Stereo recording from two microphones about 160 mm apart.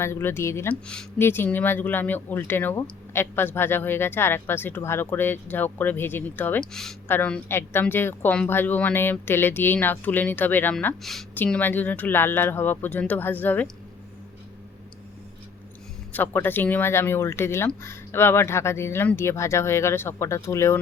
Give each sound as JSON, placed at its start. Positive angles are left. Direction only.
{"t": 0.0, "sound": "speech", "side_deg": 15}
{"t": 16.1, "sound": "speech", "side_deg": 10}